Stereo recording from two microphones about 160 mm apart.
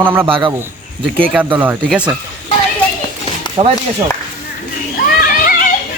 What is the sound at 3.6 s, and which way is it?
Speech, 30° right (ahead or behind).